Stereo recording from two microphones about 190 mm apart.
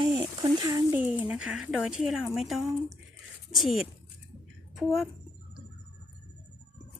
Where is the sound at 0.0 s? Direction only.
25° right (ahead or behind).